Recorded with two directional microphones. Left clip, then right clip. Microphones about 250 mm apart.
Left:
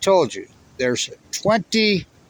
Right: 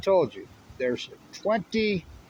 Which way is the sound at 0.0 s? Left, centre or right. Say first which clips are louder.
Left 6 dB; left.